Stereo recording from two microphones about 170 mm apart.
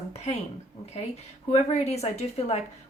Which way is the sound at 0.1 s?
40° left (ahead or behind).